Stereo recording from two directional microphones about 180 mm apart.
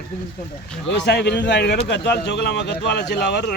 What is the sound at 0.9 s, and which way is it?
Speech, 75° left (ahead or behind).